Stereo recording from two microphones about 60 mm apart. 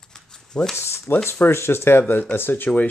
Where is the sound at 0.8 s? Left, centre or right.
Left.